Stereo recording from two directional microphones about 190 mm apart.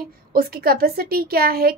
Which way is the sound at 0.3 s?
50° right (ahead or behind).